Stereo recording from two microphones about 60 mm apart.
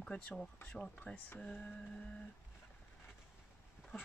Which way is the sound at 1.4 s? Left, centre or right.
Left.